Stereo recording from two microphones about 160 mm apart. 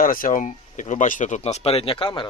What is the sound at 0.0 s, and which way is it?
Speech, 60° left (ahead or behind).